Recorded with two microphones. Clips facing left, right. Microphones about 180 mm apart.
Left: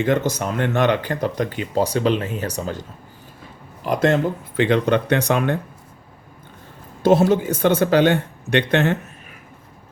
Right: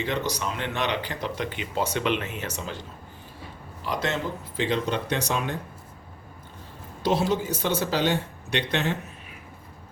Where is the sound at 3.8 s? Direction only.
50° left (ahead or behind).